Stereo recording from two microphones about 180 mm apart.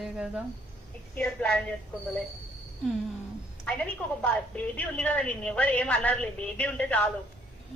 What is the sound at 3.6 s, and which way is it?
A woman's voice, 10° left (ahead or behind).